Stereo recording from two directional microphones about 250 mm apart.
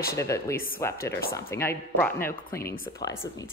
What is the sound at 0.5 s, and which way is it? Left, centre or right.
Speech, left.